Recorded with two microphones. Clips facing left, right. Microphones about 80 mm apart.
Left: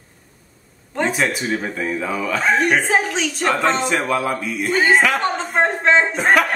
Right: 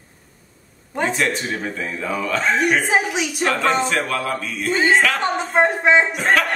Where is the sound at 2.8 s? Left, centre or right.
Centre.